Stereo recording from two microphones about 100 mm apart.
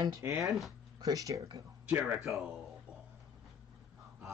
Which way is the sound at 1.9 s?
15° right (ahead or behind).